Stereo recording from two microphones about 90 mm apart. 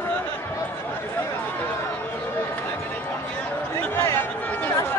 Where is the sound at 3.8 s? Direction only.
25° left (ahead or behind).